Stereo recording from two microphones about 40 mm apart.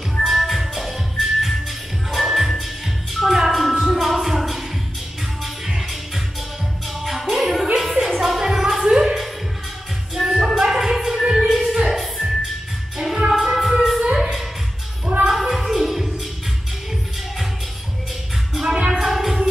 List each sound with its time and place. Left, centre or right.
0.2 s music: centre
5.8 s music: centre
7.7 s a sound: centre
9.0 s music: centre
11.6 s music: right
13.0 s music: centre
15.2 s a sound: centre
18.6 s music: centre